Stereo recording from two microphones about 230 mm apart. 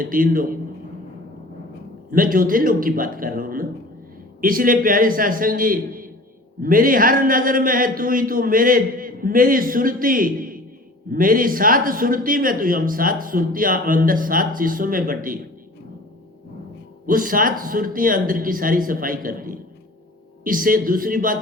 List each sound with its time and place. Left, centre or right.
0.0 s a man's voice: right
2.0 s a man's voice: right
17.1 s a man's voice: right